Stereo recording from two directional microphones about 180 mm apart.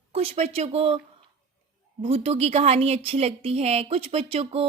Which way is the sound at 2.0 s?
35° right (ahead or behind).